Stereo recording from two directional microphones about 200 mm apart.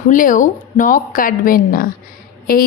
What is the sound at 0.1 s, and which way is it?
A woman's voice, 40° left (ahead or behind).